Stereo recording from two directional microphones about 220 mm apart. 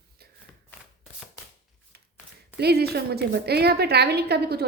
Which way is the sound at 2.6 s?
45° right (ahead or behind).